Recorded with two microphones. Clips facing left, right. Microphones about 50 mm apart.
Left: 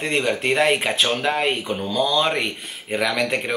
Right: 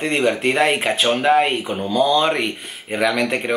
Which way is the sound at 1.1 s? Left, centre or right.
Centre.